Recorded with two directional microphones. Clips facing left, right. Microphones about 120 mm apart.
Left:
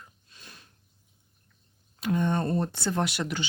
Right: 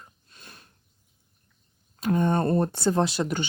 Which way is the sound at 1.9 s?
45° right (ahead or behind).